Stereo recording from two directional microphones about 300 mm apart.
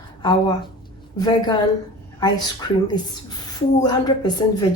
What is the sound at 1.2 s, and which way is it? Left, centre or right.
A woman's voice, centre.